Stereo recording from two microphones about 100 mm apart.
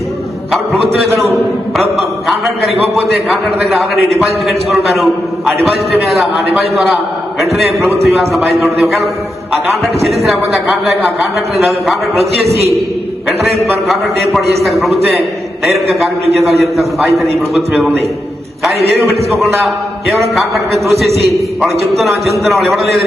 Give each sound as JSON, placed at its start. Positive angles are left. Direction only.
{"t": 1.2, "sound": "a man's voice", "side_deg": 0}
{"t": 7.5, "sound": "a man's voice", "side_deg": 0}
{"t": 12.5, "sound": "a man's voice", "side_deg": -90}
{"t": 13.7, "sound": "a man's voice", "side_deg": 0}
{"t": 21.1, "sound": "a man's voice", "side_deg": -90}
{"t": 21.6, "sound": "a man's voice", "side_deg": 0}